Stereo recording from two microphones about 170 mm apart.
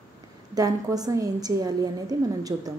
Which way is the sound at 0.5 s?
20° right (ahead or behind).